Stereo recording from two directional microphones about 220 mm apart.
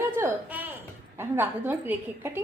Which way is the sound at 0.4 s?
5° right (ahead or behind).